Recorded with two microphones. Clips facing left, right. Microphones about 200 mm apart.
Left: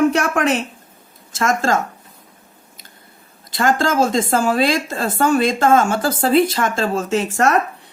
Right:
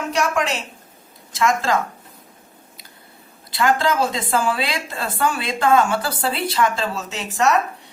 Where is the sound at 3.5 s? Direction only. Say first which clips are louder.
Left 1 dB; 45° left (ahead or behind).